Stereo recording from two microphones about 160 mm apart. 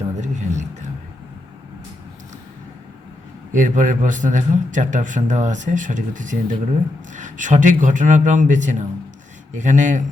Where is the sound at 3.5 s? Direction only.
50° right (ahead or behind).